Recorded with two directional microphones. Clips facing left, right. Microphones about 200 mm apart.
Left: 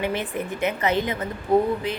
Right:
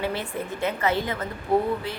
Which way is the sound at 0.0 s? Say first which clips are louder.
Left 2 dB; 20° left (ahead or behind).